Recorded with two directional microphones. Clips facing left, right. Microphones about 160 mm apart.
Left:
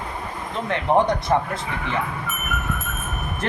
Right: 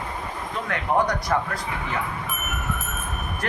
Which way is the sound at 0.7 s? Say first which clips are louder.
Left 4 dB; 25° left (ahead or behind).